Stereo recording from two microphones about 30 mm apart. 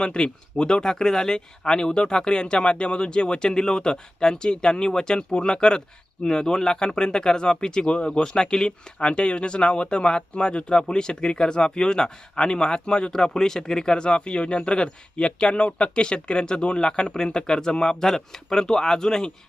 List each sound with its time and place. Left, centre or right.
0.0 s speech: left
6.2 s speech: left